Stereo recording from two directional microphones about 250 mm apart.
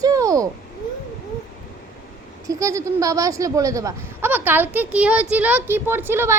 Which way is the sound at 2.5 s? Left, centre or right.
Centre.